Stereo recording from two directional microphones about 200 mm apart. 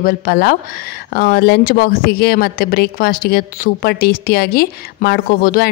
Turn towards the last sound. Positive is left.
turn(degrees=45)  # may be behind; listen again after turning